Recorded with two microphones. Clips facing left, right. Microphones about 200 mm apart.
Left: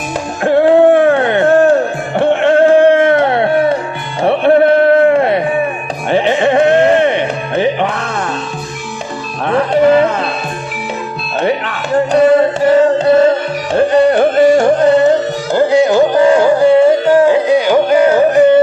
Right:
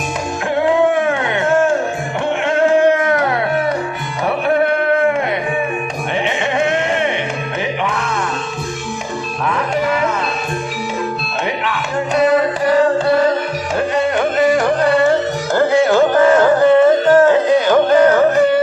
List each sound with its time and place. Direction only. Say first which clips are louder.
0.4 s music: left 7 dB; 35° left (ahead or behind)
9.4 s music: left 8 dB; 30° left (ahead or behind)
11.3 s music: left 7 dB; 35° left (ahead or behind); by 18.4 s 10° left (ahead or behind)